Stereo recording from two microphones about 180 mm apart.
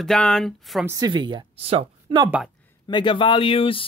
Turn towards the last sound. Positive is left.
turn(degrees=30)  # may be behind; listen again after turning